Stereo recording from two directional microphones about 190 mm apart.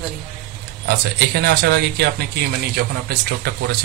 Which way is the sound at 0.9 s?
60° right (ahead or behind).